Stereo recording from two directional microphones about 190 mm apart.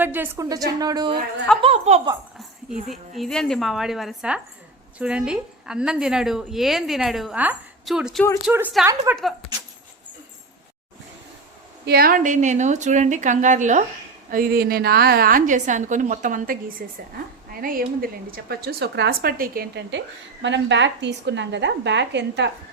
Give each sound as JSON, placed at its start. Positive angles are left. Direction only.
{"t": 0.0, "sound": "a woman's voice", "side_deg": -10}
{"t": 1.6, "sound": "a woman's voice", "side_deg": -35}
{"t": 2.6, "sound": "a woman's voice", "side_deg": 0}
{"t": 11.9, "sound": "a woman's voice", "side_deg": -50}
{"t": 20.4, "sound": "a woman's voice", "side_deg": -70}